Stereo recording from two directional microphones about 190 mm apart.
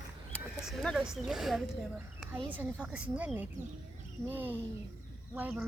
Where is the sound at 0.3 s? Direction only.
Centre (ahead or behind).